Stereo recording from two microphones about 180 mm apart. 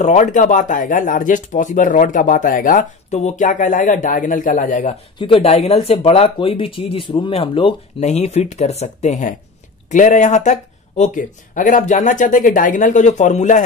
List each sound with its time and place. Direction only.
0.0 s speech: 45° left (ahead or behind)
5.2 s speech: 30° left (ahead or behind)